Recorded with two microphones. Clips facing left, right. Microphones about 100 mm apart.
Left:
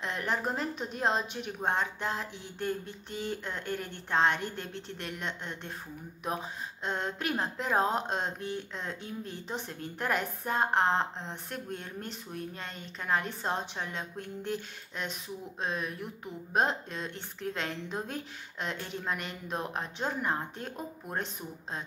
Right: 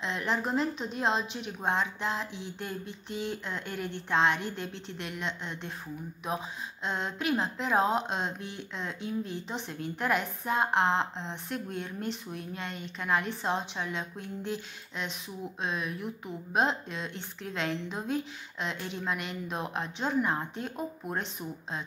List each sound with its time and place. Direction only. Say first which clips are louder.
0.0 s a woman's voice: right 1 dB; 45° left (ahead or behind)